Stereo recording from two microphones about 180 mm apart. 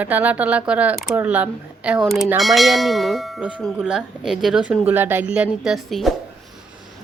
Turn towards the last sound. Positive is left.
turn(degrees=0)  # may be behind; listen again after turning